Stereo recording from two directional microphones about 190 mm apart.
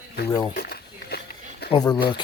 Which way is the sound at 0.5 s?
55° left (ahead or behind).